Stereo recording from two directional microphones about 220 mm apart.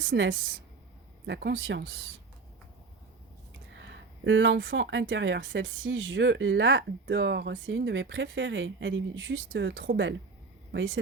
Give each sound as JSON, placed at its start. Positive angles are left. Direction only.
{"t": 0.0, "sound": "speech", "side_deg": -60}
{"t": 1.3, "sound": "speech", "side_deg": -50}
{"t": 4.2, "sound": "speech", "side_deg": -55}